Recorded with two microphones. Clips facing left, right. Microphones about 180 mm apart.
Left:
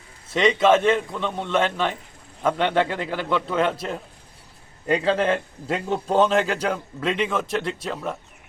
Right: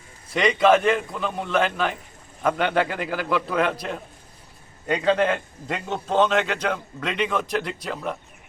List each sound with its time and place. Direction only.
0.3 s a man's voice: centre (ahead or behind)
5.3 s a man's voice: 30° left (ahead or behind)
7.0 s a man's voice: 5° left (ahead or behind)